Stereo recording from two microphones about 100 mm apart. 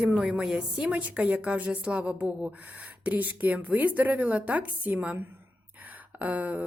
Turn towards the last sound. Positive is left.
turn(degrees=-15)  # may be behind; listen again after turning